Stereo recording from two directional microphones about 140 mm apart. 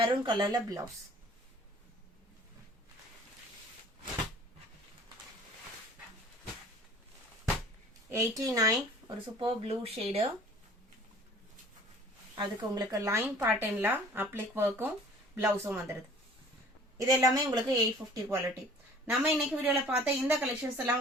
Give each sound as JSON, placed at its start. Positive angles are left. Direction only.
{"t": 0.0, "sound": "speech", "side_deg": -35}
{"t": 8.1, "sound": "speech", "side_deg": -20}
{"t": 12.4, "sound": "a woman's voice", "side_deg": -25}
{"t": 17.0, "sound": "a woman's voice", "side_deg": -25}
{"t": 19.0, "sound": "speech", "side_deg": -5}